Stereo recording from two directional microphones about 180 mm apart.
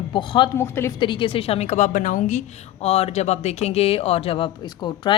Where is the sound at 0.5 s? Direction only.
15° left (ahead or behind).